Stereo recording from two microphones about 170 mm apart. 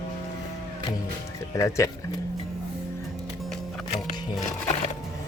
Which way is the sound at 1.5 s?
20° left (ahead or behind).